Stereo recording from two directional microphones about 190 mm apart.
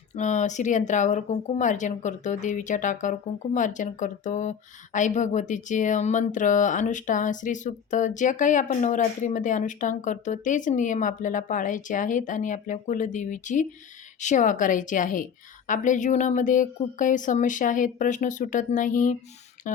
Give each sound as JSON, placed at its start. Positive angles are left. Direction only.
{"t": 0.2, "sound": "a woman's voice", "side_deg": 40}